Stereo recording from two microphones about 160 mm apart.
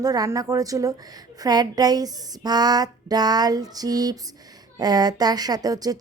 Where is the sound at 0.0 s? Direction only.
25° right (ahead or behind).